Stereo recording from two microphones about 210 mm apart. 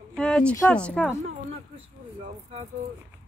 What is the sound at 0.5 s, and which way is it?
Speech, 5° left (ahead or behind).